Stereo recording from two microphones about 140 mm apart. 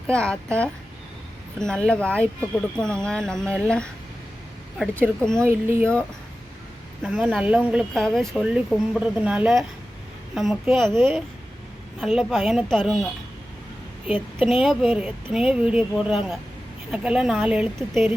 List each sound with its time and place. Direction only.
0.1 s speech: 5° left (ahead or behind)
4.9 s speech: 5° left (ahead or behind)
5.4 s speech: 15° right (ahead or behind)
7.0 s speech: 5° right (ahead or behind)
7.9 s speech: 5° left (ahead or behind)
11.9 s speech: centre (ahead or behind)
14.4 s speech: centre (ahead or behind)